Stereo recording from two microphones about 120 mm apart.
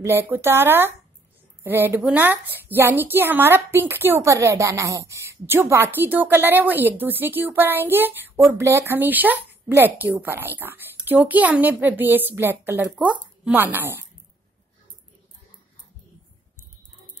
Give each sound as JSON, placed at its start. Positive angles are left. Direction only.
{"t": 0.0, "sound": "a woman's voice", "side_deg": -20}